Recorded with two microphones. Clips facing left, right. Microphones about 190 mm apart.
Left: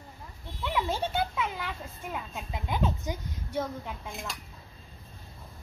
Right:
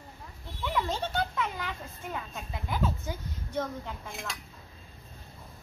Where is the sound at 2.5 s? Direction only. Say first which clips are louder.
Left 1 dB; 20° left (ahead or behind).